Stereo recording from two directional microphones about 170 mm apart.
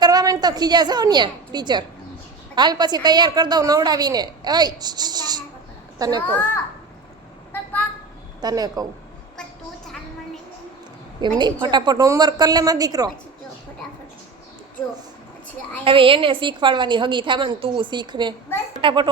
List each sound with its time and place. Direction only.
0.0 s a woman's voice: 20° right (ahead or behind)
6.2 s a child's voice: 10° left (ahead or behind)
7.5 s a sound: 10° left (ahead or behind)
8.4 s a woman's voice: 25° right (ahead or behind)
11.3 s a woman's voice: 25° right (ahead or behind)
15.8 s a woman's voice: 30° right (ahead or behind)